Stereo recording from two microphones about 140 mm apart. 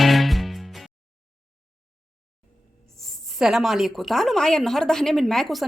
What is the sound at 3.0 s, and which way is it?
A woman's voice, centre (ahead or behind).